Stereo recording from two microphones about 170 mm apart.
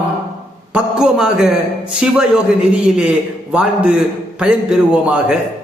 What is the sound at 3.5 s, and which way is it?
A man's voice, 5° right (ahead or behind).